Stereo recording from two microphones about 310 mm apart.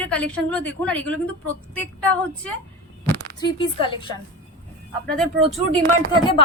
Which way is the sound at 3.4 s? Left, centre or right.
Centre.